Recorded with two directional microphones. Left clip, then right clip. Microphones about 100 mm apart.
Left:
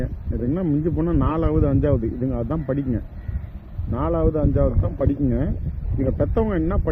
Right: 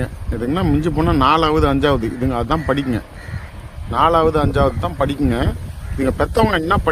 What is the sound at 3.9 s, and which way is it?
Speech, 35° right (ahead or behind).